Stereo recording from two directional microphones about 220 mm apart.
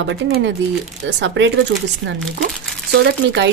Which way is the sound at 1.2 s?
55° right (ahead or behind).